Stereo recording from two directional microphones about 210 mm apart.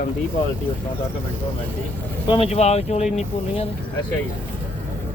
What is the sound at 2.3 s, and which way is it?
Speech, 30° left (ahead or behind).